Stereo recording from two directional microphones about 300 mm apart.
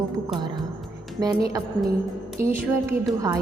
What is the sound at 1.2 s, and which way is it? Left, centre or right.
Speech, centre.